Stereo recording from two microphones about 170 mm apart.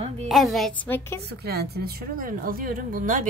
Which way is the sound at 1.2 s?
70° right (ahead or behind).